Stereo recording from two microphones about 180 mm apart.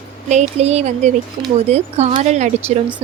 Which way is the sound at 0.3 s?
40° right (ahead or behind).